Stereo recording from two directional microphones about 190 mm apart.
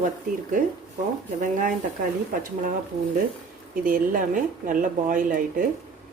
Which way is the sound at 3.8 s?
45° right (ahead or behind).